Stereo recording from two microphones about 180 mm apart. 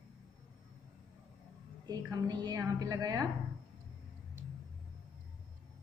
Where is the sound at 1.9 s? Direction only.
20° right (ahead or behind).